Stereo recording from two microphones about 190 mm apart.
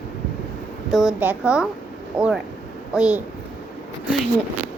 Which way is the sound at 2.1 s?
25° right (ahead or behind).